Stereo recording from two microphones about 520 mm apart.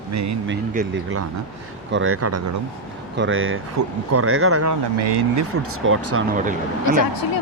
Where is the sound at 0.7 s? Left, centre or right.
Centre.